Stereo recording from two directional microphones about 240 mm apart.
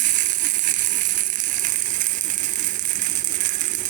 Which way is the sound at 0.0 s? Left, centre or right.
Right.